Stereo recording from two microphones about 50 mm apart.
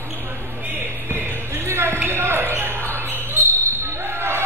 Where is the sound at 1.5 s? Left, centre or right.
Right.